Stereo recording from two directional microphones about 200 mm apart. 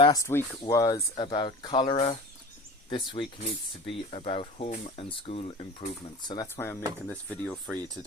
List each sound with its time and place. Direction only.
0.0 s speech: 15° left (ahead or behind)